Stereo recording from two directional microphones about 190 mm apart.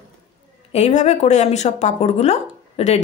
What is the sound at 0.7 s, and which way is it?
Speech, 35° left (ahead or behind).